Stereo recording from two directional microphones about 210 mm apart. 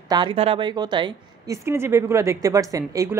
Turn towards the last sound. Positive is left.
turn(degrees=-15)  # may be behind; listen again after turning